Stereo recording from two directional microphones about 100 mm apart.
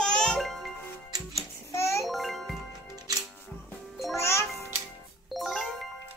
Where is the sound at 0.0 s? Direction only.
5° left (ahead or behind).